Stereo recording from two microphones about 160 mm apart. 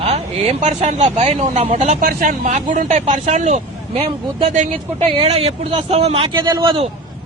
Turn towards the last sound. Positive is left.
turn(degrees=-30)  # may be behind; listen again after turning